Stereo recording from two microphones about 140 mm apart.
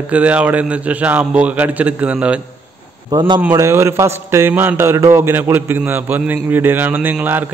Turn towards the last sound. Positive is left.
turn(degrees=-10)  # may be behind; listen again after turning